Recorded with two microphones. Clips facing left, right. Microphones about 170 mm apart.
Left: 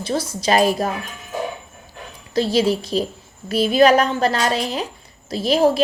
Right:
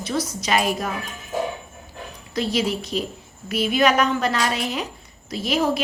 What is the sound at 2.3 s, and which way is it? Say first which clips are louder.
A woman's voice: left 5 dB; 30° left (ahead or behind).